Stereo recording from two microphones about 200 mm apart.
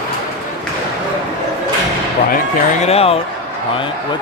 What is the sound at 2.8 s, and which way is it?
Speech, 30° left (ahead or behind).